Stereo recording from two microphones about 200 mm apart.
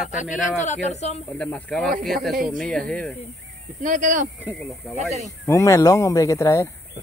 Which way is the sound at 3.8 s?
40° right (ahead or behind).